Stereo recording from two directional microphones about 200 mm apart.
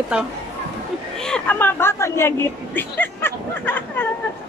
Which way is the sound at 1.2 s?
5° left (ahead or behind).